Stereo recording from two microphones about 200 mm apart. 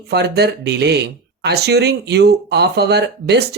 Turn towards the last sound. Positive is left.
turn(degrees=-55)  # may be behind; listen again after turning